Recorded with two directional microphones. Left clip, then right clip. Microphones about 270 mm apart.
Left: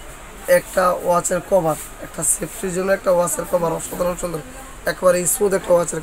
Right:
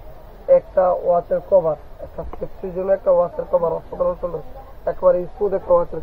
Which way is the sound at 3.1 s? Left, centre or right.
Left.